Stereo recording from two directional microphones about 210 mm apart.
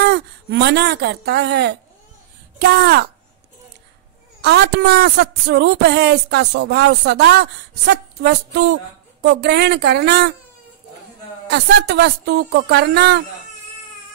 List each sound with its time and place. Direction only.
0.0 s a woman's voice: 50° right (ahead or behind)
4.4 s a woman's voice: 50° right (ahead or behind)
11.5 s a woman's voice: 50° right (ahead or behind)